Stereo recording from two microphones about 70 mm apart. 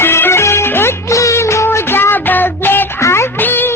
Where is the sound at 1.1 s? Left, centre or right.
Left.